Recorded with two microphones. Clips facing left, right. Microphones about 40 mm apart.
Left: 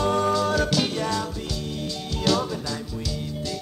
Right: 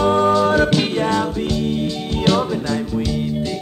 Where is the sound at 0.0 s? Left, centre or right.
Right.